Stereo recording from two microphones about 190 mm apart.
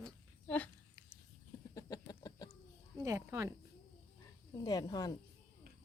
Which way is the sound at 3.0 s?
15° right (ahead or behind).